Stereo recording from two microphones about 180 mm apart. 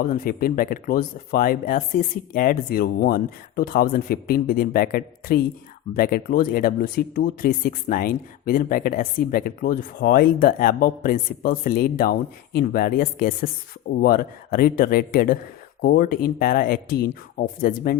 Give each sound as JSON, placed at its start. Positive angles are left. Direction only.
{"t": 0.0, "sound": "speech", "side_deg": 50}